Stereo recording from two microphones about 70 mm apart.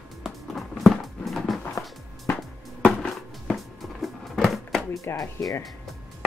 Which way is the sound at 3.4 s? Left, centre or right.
Centre.